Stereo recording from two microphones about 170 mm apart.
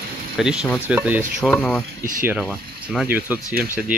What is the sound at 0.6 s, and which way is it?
Speech, 10° left (ahead or behind).